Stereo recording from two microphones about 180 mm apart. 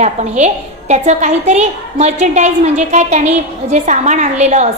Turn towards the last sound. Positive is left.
turn(degrees=-40)  # may be behind; listen again after turning